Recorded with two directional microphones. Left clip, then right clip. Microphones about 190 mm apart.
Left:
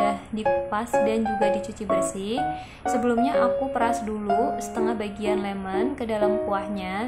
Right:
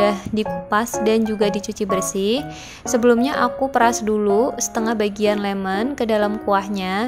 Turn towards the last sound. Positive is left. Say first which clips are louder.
# right 7 dB
turn(degrees=-40)  # may be behind; listen again after turning